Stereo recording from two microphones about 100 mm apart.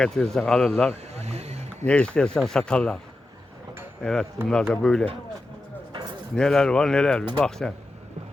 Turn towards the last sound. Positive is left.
turn(degrees=5)  # may be behind; listen again after turning